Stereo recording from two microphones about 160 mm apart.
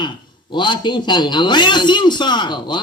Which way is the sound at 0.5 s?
30° left (ahead or behind).